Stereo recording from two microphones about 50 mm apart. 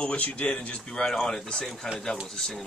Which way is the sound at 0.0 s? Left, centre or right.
Left.